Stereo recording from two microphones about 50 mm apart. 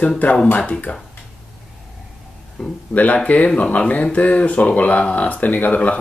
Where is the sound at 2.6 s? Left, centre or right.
Centre.